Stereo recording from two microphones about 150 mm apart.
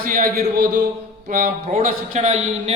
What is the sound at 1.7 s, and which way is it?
Speech, 50° right (ahead or behind).